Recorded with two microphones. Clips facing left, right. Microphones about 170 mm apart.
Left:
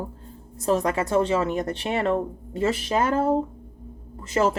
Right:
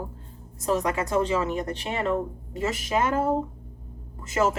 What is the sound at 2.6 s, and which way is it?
Speech, 30° left (ahead or behind).